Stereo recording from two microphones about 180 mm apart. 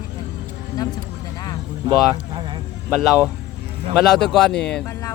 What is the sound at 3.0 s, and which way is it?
Speech, 5° right (ahead or behind).